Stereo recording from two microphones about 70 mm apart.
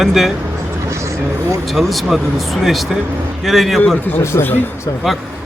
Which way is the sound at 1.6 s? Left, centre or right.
Centre.